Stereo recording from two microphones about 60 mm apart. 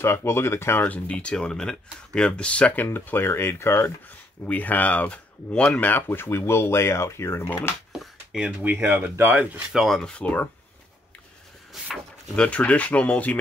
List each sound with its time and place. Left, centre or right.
0.0 s speech: left
0.8 s speech: left
4.5 s speech: left
5.8 s speech: left
7.9 s a sound: centre
8.5 s speech: right
9.8 s speech: centre
10.2 s speech: left
11.7 s speech: centre
12.4 s speech: left